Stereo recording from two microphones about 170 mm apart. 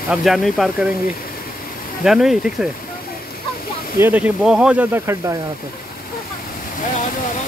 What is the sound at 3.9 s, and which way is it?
Speech, 10° right (ahead or behind).